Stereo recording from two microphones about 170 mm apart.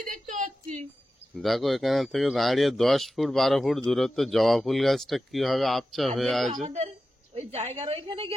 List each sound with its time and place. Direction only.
0.0 s a woman's voice: 50° right (ahead or behind)
1.4 s speech: centre (ahead or behind)
6.5 s a woman's voice: 45° right (ahead or behind)